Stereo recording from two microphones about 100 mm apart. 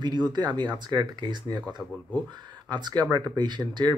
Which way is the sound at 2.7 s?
45° right (ahead or behind).